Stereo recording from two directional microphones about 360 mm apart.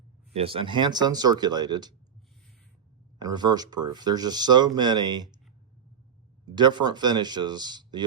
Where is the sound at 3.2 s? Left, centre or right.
Centre.